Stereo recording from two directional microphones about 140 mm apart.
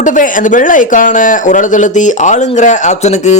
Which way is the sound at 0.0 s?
70° left (ahead or behind).